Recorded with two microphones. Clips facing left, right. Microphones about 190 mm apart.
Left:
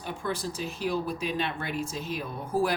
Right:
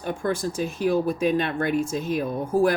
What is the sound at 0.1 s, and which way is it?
Speech, 50° right (ahead or behind).